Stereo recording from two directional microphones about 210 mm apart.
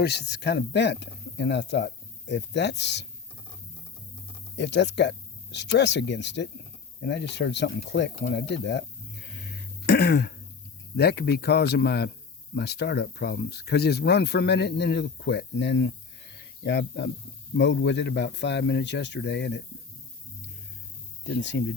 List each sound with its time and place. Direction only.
0.0 s speech: 50° left (ahead or behind)
4.5 s speech: 55° left (ahead or behind)
9.8 s speech: 50° left (ahead or behind)
21.5 s speech: 55° left (ahead or behind)